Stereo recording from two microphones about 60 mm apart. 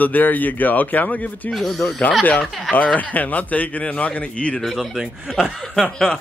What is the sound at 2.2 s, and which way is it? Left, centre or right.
Speech, left.